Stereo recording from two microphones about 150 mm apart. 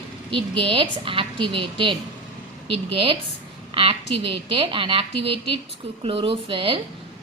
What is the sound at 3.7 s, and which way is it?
A woman's voice, 40° right (ahead or behind).